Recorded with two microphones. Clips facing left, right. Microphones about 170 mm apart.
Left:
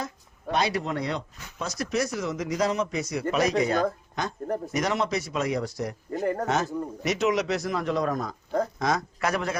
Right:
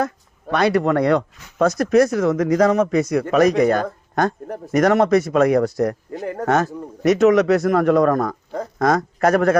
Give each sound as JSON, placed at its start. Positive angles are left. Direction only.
{"t": 0.5, "sound": "speech", "side_deg": -55}
{"t": 6.1, "sound": "speech", "side_deg": 0}
{"t": 6.4, "sound": "speech", "side_deg": -55}